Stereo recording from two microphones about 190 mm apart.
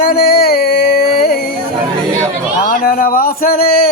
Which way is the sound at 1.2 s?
50° left (ahead or behind).